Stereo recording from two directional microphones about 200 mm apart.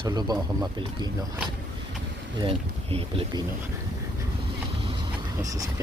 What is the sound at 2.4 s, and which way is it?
Speech, 30° right (ahead or behind).